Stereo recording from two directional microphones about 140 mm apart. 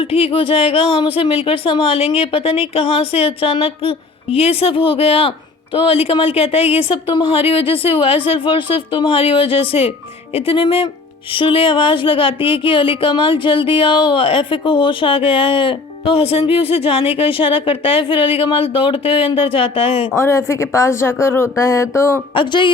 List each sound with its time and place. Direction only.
0.0 s speech: 40° left (ahead or behind)
20.1 s a woman's voice: 20° left (ahead or behind)
22.4 s speech: 35° left (ahead or behind)